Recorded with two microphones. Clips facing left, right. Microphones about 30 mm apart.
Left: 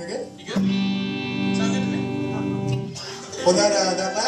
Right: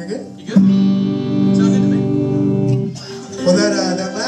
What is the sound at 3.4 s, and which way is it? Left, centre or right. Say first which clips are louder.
Music: right 4 dB; right.